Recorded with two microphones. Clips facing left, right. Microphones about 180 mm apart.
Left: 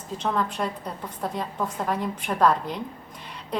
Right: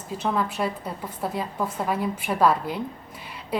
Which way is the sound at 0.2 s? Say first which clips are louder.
Right 1 dB; 5° right (ahead or behind).